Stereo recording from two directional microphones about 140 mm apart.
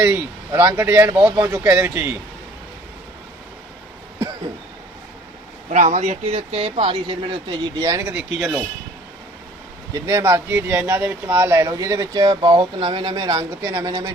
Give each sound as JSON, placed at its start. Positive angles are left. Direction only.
{"t": 0.0, "sound": "speech", "side_deg": -15}
{"t": 5.7, "sound": "speech", "side_deg": -55}
{"t": 7.8, "sound": "speech", "side_deg": -20}
{"t": 9.9, "sound": "speech", "side_deg": -20}